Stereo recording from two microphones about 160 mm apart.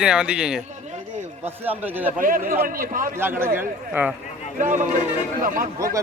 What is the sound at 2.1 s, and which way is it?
Speech, 60° right (ahead or behind).